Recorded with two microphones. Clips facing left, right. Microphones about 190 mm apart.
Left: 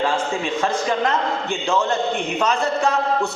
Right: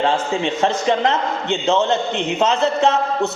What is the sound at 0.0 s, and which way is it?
A man's voice, 25° right (ahead or behind).